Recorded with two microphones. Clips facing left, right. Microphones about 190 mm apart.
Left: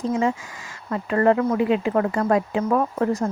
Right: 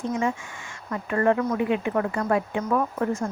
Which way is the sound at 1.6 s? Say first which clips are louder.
Left 4 dB; 90° left.